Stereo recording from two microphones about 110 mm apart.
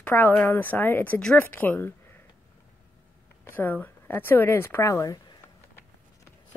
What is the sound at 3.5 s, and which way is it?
Speech, 15° left (ahead or behind).